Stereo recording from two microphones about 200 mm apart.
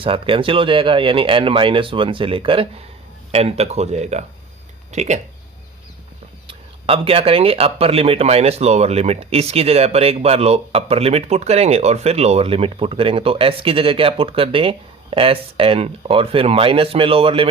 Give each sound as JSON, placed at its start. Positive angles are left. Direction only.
{"t": 0.0, "sound": "speech", "side_deg": -25}
{"t": 6.5, "sound": "speech", "side_deg": -30}